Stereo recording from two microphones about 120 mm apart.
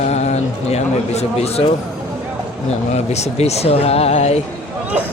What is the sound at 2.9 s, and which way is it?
Speech, 65° left (ahead or behind).